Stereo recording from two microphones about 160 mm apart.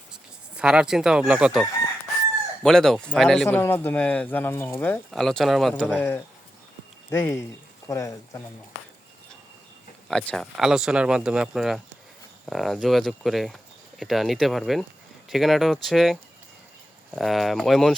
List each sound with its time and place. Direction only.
0.1 s a sound: 5° right (ahead or behind)
1.2 s speech: 5° right (ahead or behind)
3.6 s speech: 10° left (ahead or behind)
5.1 s speech: centre (ahead or behind); by 8.4 s 20° left (ahead or behind)
10.1 s speech: 5° left (ahead or behind)
17.2 s speech: centre (ahead or behind)